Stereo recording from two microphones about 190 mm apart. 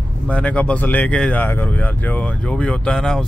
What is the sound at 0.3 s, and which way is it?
Speech, 5° left (ahead or behind).